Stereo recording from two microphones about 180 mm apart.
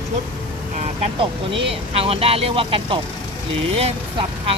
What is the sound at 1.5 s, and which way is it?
Speech, 30° right (ahead or behind).